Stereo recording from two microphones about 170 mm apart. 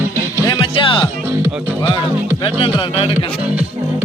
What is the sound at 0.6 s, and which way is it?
Music, 30° left (ahead or behind).